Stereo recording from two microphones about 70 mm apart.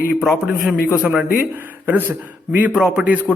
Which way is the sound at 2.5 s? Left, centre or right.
Right.